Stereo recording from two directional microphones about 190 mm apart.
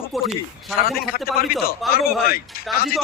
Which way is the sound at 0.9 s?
50° left (ahead or behind).